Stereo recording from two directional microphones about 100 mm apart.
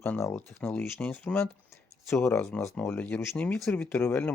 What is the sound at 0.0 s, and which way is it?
Speech, 25° left (ahead or behind).